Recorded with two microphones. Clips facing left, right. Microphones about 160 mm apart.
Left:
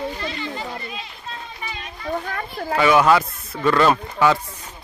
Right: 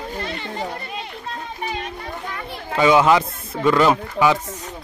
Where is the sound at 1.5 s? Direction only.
50° right (ahead or behind).